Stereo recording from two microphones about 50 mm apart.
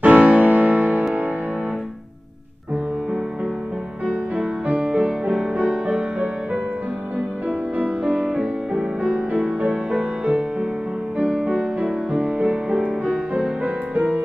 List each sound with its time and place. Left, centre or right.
0.0 s music: right
4.0 s music: right
13.9 s music: right